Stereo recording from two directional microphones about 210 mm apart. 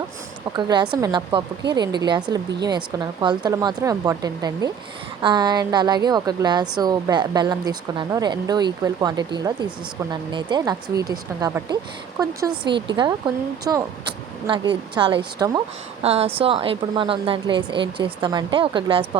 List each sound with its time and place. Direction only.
0.5 s a woman's voice: 20° right (ahead or behind)